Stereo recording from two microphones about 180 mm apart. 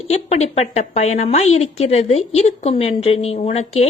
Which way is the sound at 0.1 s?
35° left (ahead or behind).